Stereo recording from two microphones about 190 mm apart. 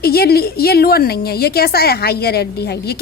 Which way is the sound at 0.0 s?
55° left (ahead or behind).